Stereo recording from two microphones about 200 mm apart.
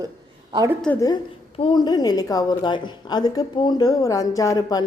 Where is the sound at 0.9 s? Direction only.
20° left (ahead or behind).